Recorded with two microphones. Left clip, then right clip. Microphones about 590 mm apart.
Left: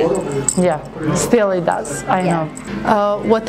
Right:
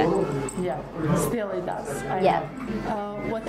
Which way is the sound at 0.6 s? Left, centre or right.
Left.